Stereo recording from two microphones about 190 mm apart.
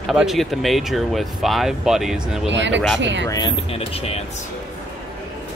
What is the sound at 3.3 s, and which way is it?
Speech, 25° left (ahead or behind).